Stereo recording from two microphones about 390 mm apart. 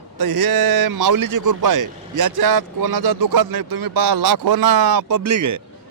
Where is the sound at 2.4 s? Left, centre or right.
Right.